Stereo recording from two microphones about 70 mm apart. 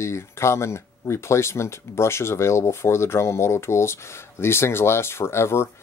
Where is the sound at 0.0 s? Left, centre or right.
Left.